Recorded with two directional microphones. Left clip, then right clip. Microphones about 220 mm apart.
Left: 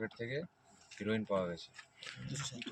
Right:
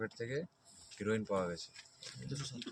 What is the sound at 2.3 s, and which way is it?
Speech, 20° right (ahead or behind).